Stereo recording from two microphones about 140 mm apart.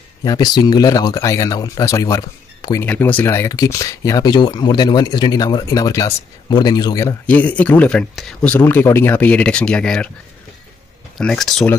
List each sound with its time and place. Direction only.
0.2 s speech: 30° left (ahead or behind)
2.8 s speech: 10° left (ahead or behind)
7.2 s speech: 10° left (ahead or behind)
11.1 s speech: 5° left (ahead or behind)